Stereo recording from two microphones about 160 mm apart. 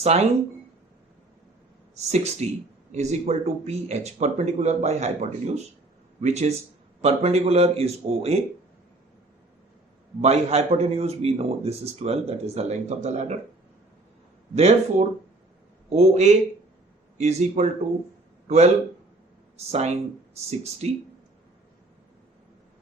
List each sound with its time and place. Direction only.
0.0 s a man's voice: 40° right (ahead or behind)
2.0 s a man's voice: 45° right (ahead or behind)
10.2 s a man's voice: 40° right (ahead or behind)
14.5 s a man's voice: 40° right (ahead or behind)
19.7 s speech: 45° right (ahead or behind)